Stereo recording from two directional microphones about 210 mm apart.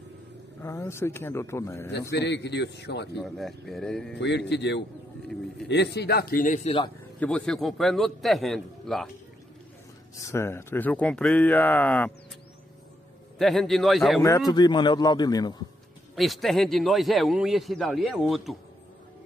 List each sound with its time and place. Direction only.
0.6 s speech: 10° left (ahead or behind)
1.9 s a man's voice: 55° left (ahead or behind)
3.2 s a man's voice: centre (ahead or behind)
4.2 s a man's voice: 55° left (ahead or behind); by 6.7 s 40° left (ahead or behind)
7.2 s a man's voice: 5° left (ahead or behind)
10.2 s speech: 10° left (ahead or behind)
13.4 s a man's voice: centre (ahead or behind)
14.5 s a man's voice: 20° left (ahead or behind)
16.2 s a man's voice: centre (ahead or behind)